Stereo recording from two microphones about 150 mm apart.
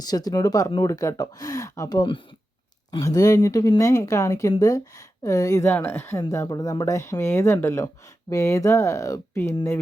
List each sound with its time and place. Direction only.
0.0 s speech: 25° left (ahead or behind)